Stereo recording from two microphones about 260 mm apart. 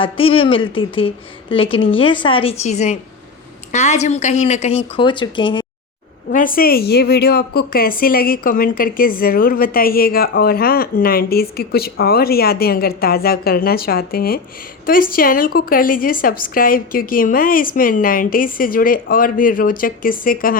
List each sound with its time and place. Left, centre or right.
0.0 s a woman's voice: left
6.3 s a woman's voice: left